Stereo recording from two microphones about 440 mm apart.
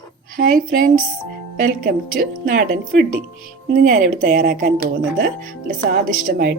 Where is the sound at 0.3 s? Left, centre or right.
Centre.